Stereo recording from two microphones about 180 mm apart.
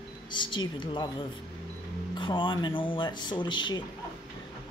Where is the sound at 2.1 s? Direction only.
25° left (ahead or behind).